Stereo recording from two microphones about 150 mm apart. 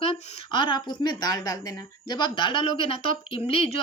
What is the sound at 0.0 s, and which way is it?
Speech, 35° left (ahead or behind).